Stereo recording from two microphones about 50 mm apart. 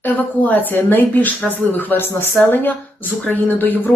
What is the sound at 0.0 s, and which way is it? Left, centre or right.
Speech, left.